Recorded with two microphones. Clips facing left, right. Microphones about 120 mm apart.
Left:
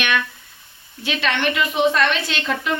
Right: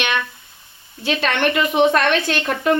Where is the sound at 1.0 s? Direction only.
40° right (ahead or behind).